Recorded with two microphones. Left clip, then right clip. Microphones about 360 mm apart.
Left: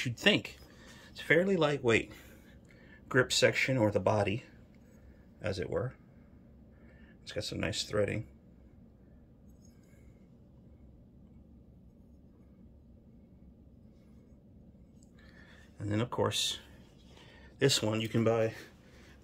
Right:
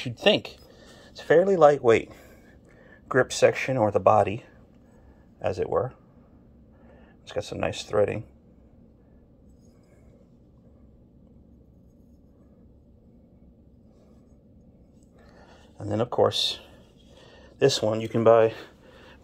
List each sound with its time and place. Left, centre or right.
0.0 s speech: centre
5.5 s speech: centre
7.5 s speech: centre
15.9 s speech: centre
18.1 s a sound: centre